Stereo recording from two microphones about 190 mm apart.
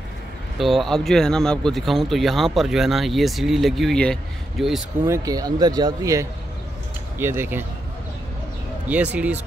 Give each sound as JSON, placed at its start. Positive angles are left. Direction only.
{"t": 0.6, "sound": "speech", "side_deg": 0}
{"t": 5.0, "sound": "speech", "side_deg": -15}
{"t": 8.8, "sound": "speech", "side_deg": -5}